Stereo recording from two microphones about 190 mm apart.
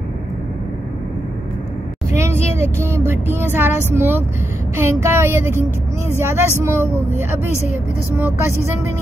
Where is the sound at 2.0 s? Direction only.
15° right (ahead or behind).